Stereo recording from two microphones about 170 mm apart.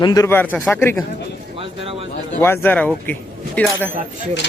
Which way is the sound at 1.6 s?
35° right (ahead or behind).